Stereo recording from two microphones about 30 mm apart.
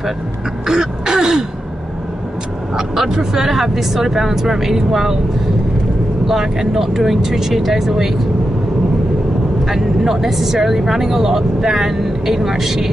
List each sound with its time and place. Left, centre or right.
0.7 s throat clearing: centre
2.7 s speech: centre
6.2 s speech: centre
9.7 s speech: centre